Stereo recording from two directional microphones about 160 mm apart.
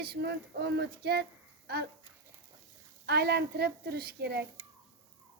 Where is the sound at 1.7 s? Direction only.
75° right (ahead or behind).